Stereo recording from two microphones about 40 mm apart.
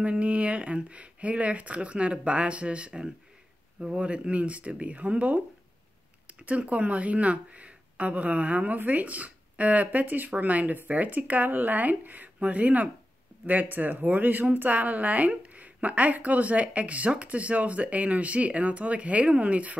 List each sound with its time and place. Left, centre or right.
0.0 s speech: right